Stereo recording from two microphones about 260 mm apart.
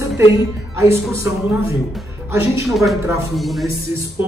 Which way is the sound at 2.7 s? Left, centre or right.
Centre.